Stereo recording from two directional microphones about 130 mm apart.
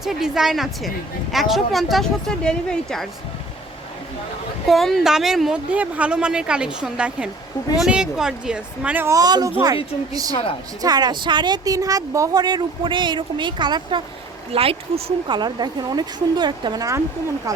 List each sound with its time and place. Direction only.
0.0 s speech: 5° right (ahead or behind)
4.6 s speech: centre (ahead or behind)
9.0 s speech: 30° right (ahead or behind)
14.5 s speech: 50° right (ahead or behind)
15.4 s speech: 35° right (ahead or behind)